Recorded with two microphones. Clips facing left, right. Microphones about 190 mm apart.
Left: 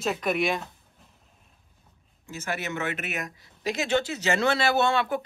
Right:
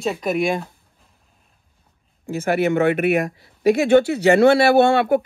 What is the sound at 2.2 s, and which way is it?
Speech, 55° right (ahead or behind).